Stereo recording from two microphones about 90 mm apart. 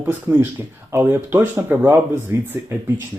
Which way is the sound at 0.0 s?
25° right (ahead or behind).